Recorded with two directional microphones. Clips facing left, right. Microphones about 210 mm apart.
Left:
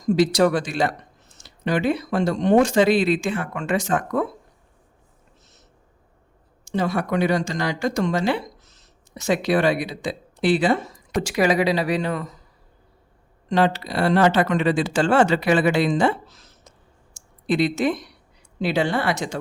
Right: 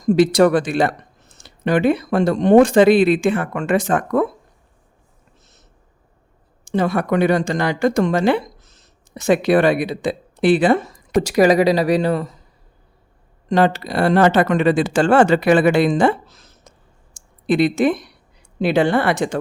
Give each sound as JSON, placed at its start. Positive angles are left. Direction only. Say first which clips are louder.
{"t": 0.0, "sound": "speech", "louder": "right 4 dB", "side_deg": -55}
{"t": 6.7, "sound": "speech", "louder": "right 4 dB", "side_deg": -55}
{"t": 11.2, "sound": "speech", "louder": "right 6 dB", "side_deg": -40}
{"t": 13.5, "sound": "speech", "louder": "right 4 dB", "side_deg": -45}
{"t": 17.4, "sound": "speech", "louder": "right 5 dB", "side_deg": -55}